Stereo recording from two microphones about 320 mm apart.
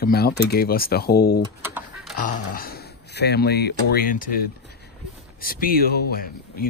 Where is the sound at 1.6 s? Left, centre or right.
Centre.